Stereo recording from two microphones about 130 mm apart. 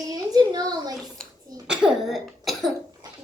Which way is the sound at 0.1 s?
30° right (ahead or behind).